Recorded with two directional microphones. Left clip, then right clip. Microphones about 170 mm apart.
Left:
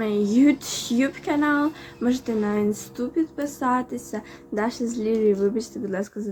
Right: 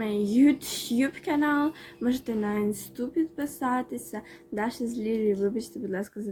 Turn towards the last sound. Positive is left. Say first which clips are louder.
# left 5 dB
turn(degrees=-5)  # may be behind; listen again after turning